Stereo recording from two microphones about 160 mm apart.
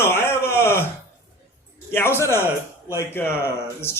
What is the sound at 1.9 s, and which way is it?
A man's voice, 15° left (ahead or behind).